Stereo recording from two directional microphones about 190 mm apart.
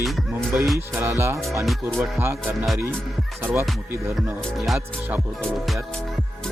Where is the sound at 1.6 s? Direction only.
Centre (ahead or behind).